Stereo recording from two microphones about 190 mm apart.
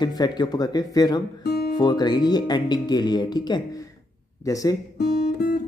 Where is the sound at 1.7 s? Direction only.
20° left (ahead or behind).